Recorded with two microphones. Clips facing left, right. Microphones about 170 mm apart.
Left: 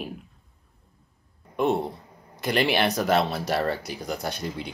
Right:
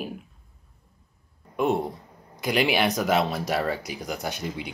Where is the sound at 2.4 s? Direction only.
5° right (ahead or behind).